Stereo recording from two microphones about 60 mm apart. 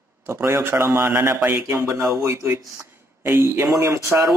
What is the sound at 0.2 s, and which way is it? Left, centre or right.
Speech, right.